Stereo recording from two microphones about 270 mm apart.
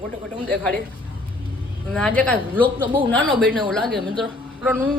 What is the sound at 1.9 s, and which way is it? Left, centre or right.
A woman's voice, centre.